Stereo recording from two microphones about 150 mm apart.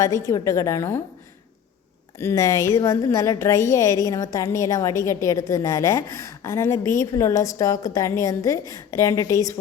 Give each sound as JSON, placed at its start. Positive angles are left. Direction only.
{"t": 0.3, "sound": "a woman's voice", "side_deg": 20}
{"t": 2.1, "sound": "a woman's voice", "side_deg": 20}